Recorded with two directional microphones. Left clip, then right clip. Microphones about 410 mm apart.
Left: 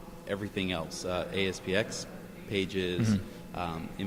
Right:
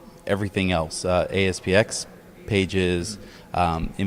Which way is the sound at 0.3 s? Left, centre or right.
Right.